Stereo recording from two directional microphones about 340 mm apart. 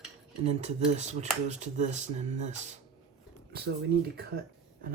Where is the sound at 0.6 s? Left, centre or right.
Centre.